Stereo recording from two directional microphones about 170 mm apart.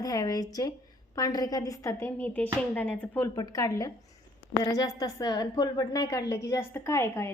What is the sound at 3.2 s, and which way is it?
A woman's voice, 20° left (ahead or behind).